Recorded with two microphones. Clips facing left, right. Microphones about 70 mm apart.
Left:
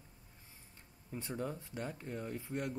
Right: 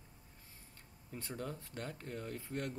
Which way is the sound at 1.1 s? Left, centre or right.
Centre.